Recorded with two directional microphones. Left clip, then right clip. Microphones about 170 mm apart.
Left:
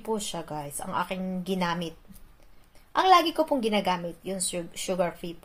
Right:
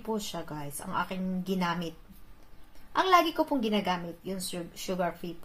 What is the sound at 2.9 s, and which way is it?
A woman's voice, 40° left (ahead or behind).